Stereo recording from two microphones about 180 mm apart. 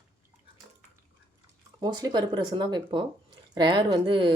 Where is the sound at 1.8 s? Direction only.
20° right (ahead or behind).